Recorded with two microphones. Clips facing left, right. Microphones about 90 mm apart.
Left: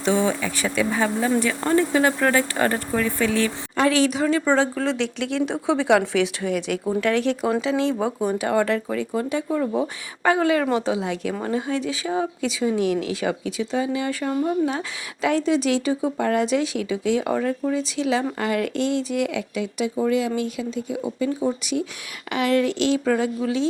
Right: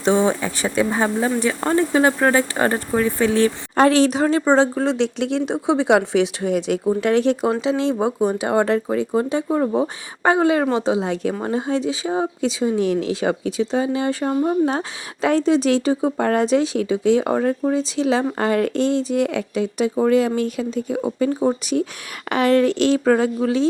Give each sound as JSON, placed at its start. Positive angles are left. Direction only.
{"t": 0.0, "sound": "speech", "side_deg": -25}